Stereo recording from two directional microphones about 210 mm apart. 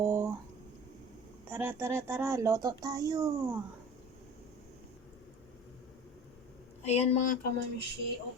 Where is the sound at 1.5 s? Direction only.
10° right (ahead or behind).